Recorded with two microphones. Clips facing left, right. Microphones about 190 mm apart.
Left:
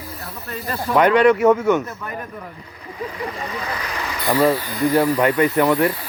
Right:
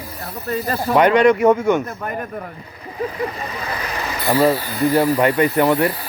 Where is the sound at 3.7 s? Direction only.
30° right (ahead or behind).